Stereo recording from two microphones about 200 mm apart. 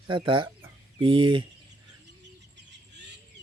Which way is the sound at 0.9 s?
25° right (ahead or behind).